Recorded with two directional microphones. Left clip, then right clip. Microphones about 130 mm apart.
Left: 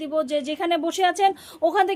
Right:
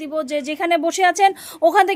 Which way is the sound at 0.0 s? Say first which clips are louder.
Right 1 dB; 25° right (ahead or behind).